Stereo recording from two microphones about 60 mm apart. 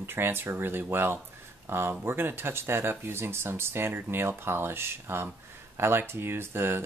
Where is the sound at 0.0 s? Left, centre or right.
Right.